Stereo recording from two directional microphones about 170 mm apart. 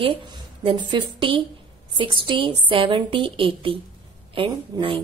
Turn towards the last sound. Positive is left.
turn(degrees=-30)  # may be behind; listen again after turning